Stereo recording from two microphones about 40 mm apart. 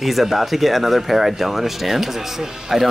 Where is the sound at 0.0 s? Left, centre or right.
Centre.